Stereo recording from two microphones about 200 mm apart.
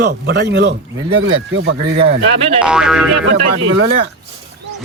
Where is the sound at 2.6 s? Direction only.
5° right (ahead or behind).